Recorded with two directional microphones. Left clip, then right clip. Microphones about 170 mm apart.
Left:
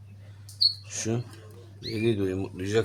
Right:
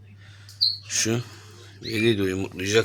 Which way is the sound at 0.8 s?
5° right (ahead or behind).